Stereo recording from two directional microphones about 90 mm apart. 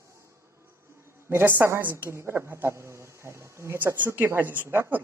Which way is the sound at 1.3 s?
20° right (ahead or behind).